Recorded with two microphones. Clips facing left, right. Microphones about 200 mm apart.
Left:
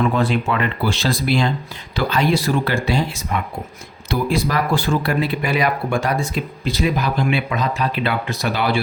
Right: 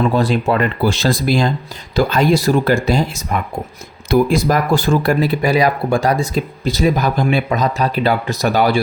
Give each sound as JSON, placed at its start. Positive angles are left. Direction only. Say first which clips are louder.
{"t": 0.0, "sound": "speech", "louder": "right 3 dB", "side_deg": -35}